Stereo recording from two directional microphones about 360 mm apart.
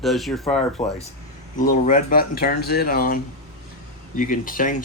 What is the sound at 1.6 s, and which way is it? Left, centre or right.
Speech, left.